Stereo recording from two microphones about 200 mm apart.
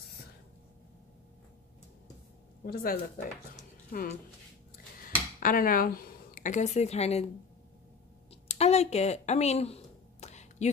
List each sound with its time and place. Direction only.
2.6 s speech: 50° left (ahead or behind)
5.4 s a woman's voice: 45° left (ahead or behind)
8.5 s a sound: 30° left (ahead or behind)